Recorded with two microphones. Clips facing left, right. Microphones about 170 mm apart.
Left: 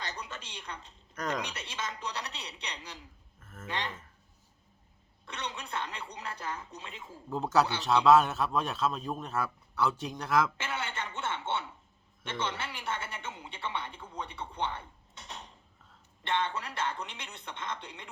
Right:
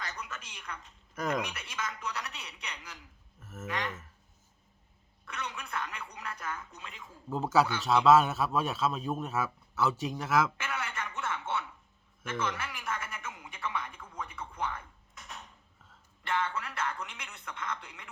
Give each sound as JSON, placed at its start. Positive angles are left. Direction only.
{"t": 0.0, "sound": "a woman's voice", "side_deg": 30}
{"t": 1.1, "sound": "speech", "side_deg": -5}
{"t": 1.5, "sound": "speech", "side_deg": 30}
{"t": 3.4, "sound": "speech", "side_deg": -5}
{"t": 3.7, "sound": "speech", "side_deg": 30}
{"t": 5.2, "sound": "speech", "side_deg": 30}
{"t": 7.3, "sound": "a man's voice", "side_deg": 0}
{"t": 10.6, "sound": "speech", "side_deg": 30}